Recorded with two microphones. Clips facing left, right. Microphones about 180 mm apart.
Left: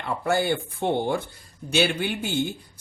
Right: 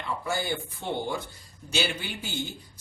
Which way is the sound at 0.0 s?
60° left (ahead or behind).